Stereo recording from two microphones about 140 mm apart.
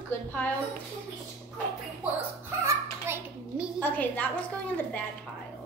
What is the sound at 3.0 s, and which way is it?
Speech, 15° right (ahead or behind).